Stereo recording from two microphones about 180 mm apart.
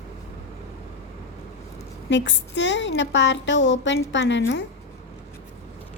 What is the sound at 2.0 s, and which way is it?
A woman's voice, 85° left.